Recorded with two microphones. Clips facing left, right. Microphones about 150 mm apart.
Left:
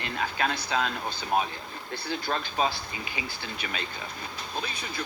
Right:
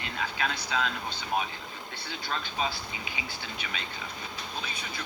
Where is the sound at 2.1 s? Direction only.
45° left (ahead or behind).